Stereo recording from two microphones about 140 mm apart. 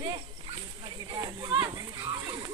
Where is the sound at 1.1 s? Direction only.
35° right (ahead or behind).